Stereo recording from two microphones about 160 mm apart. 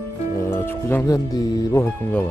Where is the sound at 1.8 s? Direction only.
10° left (ahead or behind).